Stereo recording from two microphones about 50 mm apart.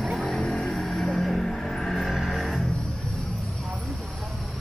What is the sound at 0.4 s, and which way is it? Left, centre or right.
Vehicle, centre.